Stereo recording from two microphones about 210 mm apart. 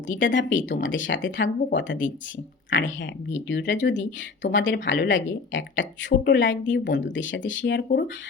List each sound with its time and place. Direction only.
0.1 s speech: 60° left (ahead or behind)